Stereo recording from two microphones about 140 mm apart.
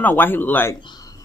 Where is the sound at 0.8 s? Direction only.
35° left (ahead or behind).